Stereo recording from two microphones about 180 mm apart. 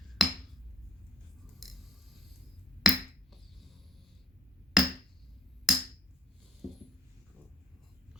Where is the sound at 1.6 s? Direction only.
Centre (ahead or behind).